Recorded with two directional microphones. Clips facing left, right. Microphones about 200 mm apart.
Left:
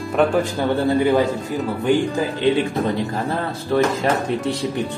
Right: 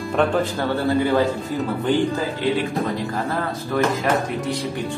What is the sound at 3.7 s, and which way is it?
Music, 30° left (ahead or behind).